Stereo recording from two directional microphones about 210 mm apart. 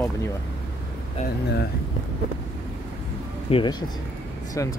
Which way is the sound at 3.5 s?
25° left (ahead or behind).